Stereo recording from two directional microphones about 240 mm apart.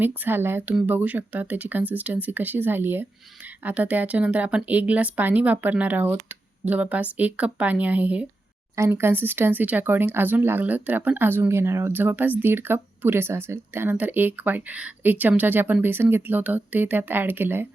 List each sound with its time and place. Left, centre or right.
0.0 s speech: centre